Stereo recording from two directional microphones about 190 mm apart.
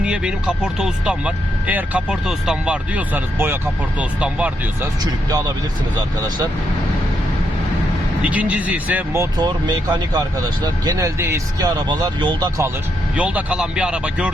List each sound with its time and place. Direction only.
0.0 s speech: 5° right (ahead or behind)
5.3 s speech: 20° right (ahead or behind)
8.3 s speech: 5° right (ahead or behind)
13.1 s speech: 5° right (ahead or behind)